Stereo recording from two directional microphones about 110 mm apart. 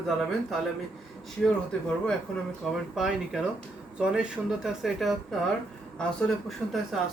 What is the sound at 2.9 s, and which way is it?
Speech, 5° right (ahead or behind).